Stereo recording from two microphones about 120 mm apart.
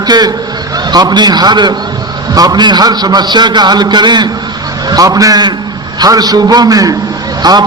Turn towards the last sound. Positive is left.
turn(degrees=-35)  # may be behind; listen again after turning